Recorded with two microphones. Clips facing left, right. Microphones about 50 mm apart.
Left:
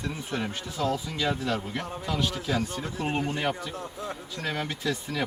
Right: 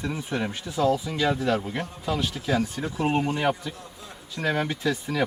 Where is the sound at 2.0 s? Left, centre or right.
Centre.